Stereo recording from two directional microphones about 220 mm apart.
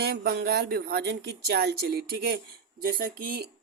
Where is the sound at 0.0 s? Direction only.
45° right (ahead or behind).